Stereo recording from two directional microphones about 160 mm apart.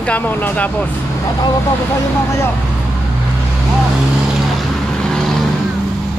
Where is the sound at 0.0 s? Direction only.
10° left (ahead or behind).